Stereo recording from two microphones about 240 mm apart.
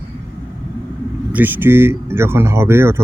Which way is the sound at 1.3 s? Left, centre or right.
Centre.